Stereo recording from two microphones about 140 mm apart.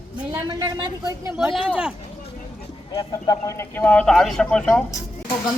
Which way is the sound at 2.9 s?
25° left (ahead or behind).